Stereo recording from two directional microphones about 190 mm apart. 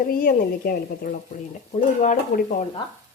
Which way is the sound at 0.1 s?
50° left (ahead or behind).